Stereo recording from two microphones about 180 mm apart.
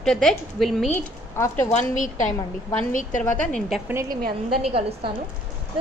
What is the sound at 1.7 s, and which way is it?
A woman's voice, 45° left (ahead or behind).